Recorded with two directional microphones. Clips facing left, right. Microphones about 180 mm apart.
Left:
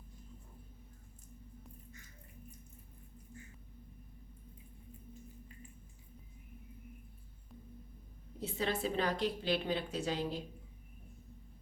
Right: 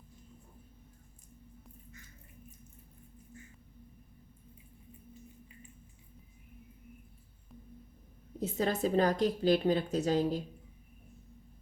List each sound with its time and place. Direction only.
8.4 s a woman's voice: 45° right (ahead or behind)